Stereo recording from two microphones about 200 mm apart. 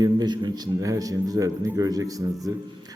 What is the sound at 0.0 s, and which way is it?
A man's voice, 20° right (ahead or behind).